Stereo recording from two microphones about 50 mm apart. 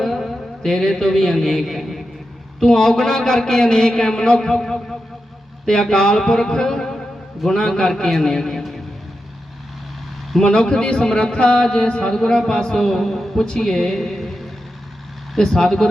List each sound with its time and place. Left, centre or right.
0.0 s a man's voice: centre
10.4 s a man's voice: centre